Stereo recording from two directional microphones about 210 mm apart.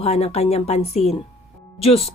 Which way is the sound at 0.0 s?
30° left (ahead or behind).